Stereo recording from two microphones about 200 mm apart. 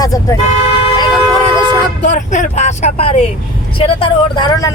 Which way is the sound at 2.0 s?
40° left (ahead or behind).